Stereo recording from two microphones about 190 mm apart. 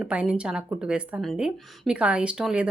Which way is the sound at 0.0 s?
5° right (ahead or behind).